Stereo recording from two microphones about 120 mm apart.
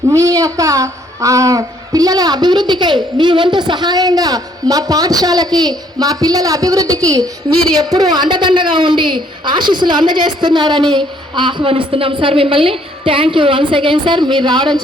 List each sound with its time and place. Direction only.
0.1 s a woman's voice: 25° right (ahead or behind)